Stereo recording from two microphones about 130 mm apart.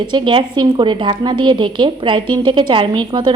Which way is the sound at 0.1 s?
40° right (ahead or behind).